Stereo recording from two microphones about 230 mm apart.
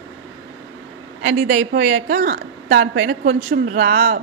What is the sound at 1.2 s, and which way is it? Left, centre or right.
A woman's voice, right.